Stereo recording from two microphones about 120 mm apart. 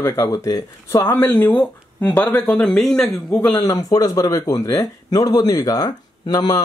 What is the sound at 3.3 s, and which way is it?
Speech, 20° left (ahead or behind).